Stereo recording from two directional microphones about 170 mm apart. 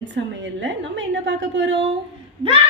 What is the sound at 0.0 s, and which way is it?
A woman's voice, 90° right.